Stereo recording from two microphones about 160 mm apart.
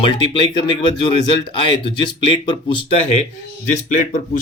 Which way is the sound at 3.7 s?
50° left (ahead or behind).